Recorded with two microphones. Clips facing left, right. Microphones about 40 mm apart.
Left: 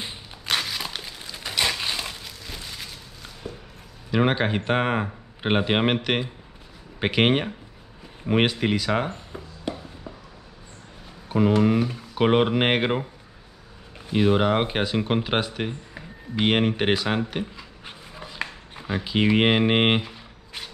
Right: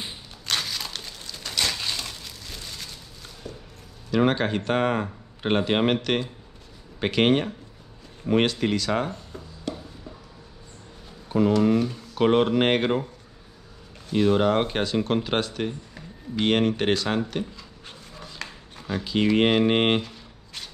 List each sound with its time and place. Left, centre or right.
0.5 s a sound: centre
2.2 s a sound: centre
4.1 s speech: centre
8.3 s music: centre
11.2 s speech: centre
14.0 s speech: centre